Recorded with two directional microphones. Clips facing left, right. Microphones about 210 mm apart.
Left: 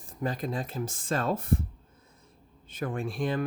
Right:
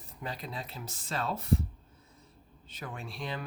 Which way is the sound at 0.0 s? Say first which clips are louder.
Left 8 dB; 50° left (ahead or behind).